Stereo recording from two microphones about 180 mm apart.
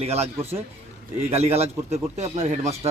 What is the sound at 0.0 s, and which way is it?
Speech, 35° right (ahead or behind).